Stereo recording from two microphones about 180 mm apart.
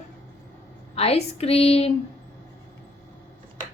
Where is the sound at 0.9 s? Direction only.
35° left (ahead or behind).